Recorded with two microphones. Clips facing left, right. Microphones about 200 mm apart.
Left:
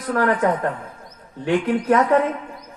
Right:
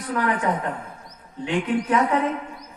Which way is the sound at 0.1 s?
55° left (ahead or behind).